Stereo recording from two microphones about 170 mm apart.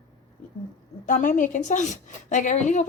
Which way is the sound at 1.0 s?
50° left (ahead or behind).